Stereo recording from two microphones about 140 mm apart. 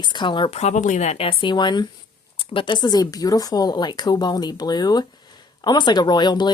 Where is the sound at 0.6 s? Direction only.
60° left (ahead or behind).